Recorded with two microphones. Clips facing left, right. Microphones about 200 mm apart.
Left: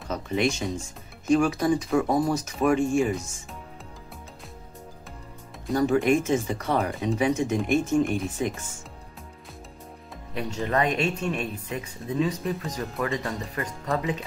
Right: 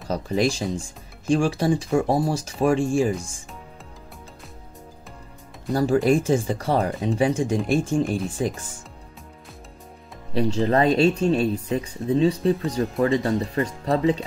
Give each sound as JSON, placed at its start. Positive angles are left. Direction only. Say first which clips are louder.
{"t": 0.1, "sound": "speech", "louder": "right 3 dB", "side_deg": -35}
{"t": 5.7, "sound": "speech", "louder": "right 2 dB", "side_deg": -35}
{"t": 10.3, "sound": "speech", "louder": "right 6 dB", "side_deg": -30}